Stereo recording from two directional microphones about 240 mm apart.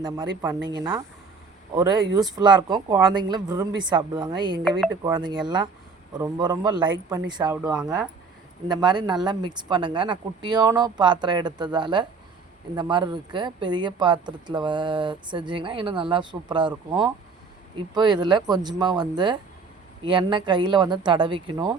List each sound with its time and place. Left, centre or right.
0.0 s speech: centre
2.3 s speech: centre
8.6 s speech: centre